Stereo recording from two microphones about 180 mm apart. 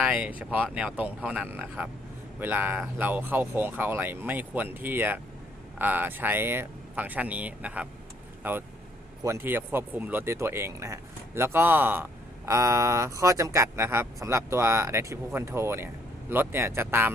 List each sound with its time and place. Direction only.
0.0 s speech: 5° right (ahead or behind)